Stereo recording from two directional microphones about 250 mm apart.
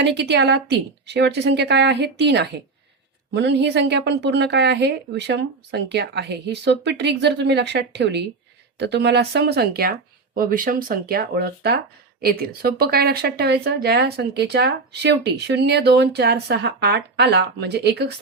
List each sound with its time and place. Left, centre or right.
0.0 s a woman's voice: right